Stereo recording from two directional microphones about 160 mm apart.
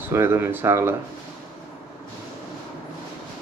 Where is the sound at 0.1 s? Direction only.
15° right (ahead or behind).